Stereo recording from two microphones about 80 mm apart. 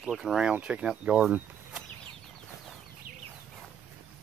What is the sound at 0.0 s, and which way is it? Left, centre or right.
Speech, centre.